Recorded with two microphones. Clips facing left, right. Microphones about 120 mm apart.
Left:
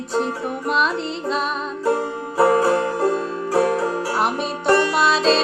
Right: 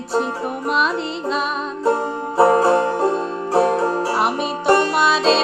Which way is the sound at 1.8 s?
30° right (ahead or behind).